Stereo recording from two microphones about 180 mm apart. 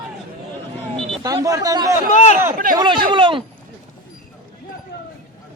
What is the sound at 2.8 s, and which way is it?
Speech, 25° right (ahead or behind).